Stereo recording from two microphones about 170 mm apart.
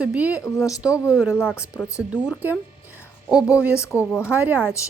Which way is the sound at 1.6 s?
15° left (ahead or behind).